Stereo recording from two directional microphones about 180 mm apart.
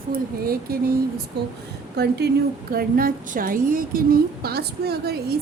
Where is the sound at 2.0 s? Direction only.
65° right (ahead or behind).